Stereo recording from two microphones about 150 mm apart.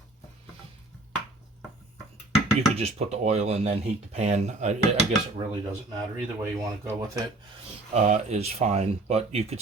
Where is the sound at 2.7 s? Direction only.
45° right (ahead or behind).